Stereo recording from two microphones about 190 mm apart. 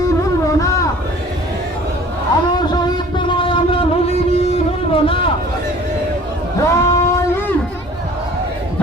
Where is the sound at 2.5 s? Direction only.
20° left (ahead or behind).